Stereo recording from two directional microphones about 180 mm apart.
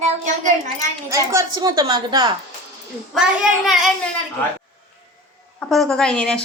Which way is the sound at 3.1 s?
Centre (ahead or behind).